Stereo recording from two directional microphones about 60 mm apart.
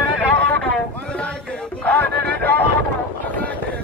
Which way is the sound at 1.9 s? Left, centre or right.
Left.